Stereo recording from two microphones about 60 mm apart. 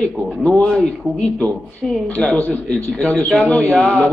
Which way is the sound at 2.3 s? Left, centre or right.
Left.